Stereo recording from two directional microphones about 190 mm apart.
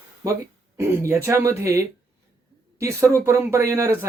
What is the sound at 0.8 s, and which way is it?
Speech, 15° right (ahead or behind).